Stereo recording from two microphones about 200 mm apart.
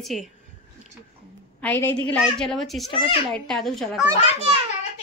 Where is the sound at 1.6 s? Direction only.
10° left (ahead or behind).